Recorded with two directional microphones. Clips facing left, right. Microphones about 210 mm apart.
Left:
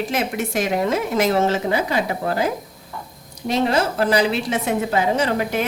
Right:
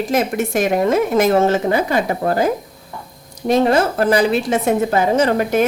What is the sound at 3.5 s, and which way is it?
Speech, 50° right (ahead or behind).